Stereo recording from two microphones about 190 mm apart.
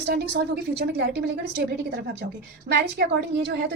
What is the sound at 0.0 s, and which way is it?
A woman's voice, 60° right (ahead or behind).